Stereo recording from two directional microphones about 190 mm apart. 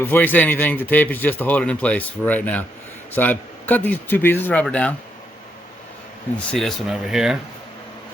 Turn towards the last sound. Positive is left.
turn(degrees=-5)  # may be behind; listen again after turning